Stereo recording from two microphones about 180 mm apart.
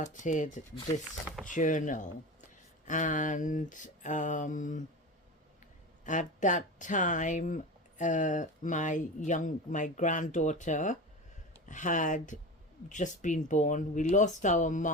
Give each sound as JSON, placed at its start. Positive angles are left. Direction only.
{"t": 0.0, "sound": "speech", "side_deg": 45}
{"t": 6.1, "sound": "speech", "side_deg": 45}